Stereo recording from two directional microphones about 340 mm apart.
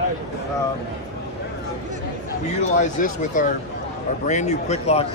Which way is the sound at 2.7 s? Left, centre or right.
Left.